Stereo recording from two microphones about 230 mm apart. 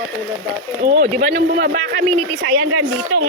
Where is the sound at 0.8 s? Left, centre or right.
Right.